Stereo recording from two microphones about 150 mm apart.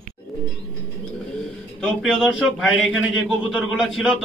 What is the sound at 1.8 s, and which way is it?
A man's voice, 5° right (ahead or behind).